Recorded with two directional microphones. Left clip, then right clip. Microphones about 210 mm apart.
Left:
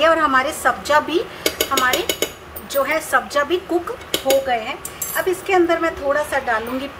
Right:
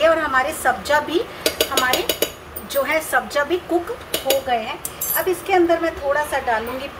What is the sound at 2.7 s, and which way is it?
Speech, 5° left (ahead or behind).